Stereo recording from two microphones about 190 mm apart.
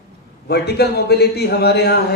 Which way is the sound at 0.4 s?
60° left (ahead or behind).